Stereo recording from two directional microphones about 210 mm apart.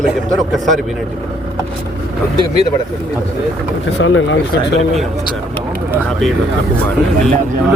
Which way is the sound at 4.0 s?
65° left (ahead or behind).